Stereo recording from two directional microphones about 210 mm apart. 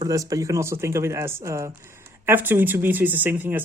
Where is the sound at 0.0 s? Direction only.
15° right (ahead or behind).